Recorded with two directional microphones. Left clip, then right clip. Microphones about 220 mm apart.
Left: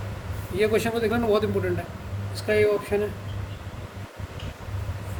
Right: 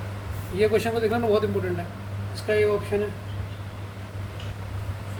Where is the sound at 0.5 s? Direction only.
35° left (ahead or behind).